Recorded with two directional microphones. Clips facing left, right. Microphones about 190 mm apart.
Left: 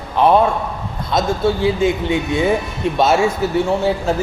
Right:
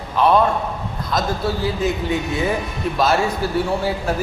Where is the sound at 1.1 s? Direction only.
25° left (ahead or behind).